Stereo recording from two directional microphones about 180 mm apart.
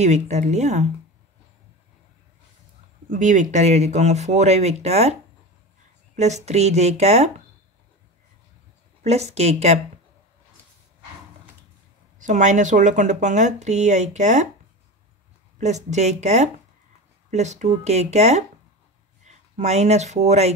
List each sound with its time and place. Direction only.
0.0 s speech: 40° right (ahead or behind)
3.1 s speech: 45° right (ahead or behind)
6.1 s speech: 40° right (ahead or behind)
9.0 s speech: 35° right (ahead or behind)
12.2 s speech: 45° right (ahead or behind)
15.5 s speech: 40° right (ahead or behind)
19.5 s speech: 40° right (ahead or behind)